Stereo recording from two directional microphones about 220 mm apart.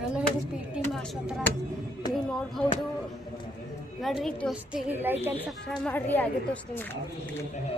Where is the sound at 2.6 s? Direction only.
10° left (ahead or behind).